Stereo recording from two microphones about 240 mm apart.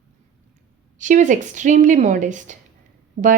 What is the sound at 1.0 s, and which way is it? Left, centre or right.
Speech, right.